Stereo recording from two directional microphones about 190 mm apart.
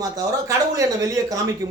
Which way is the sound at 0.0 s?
20° right (ahead or behind).